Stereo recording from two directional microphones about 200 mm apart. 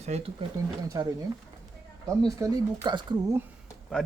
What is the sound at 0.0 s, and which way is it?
Speech, 30° right (ahead or behind).